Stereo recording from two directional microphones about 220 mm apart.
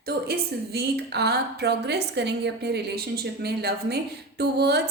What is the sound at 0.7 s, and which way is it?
A woman's voice, 50° right (ahead or behind).